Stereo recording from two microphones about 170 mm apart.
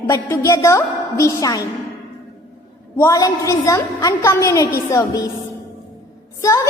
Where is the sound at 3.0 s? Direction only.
20° left (ahead or behind).